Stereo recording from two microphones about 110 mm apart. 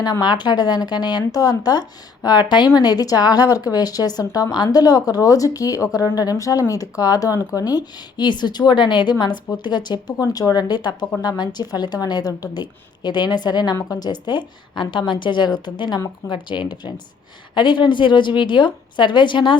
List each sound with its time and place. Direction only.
0.0 s a woman's voice: 40° left (ahead or behind)